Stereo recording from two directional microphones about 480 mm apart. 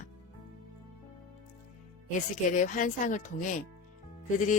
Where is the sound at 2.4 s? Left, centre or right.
Centre.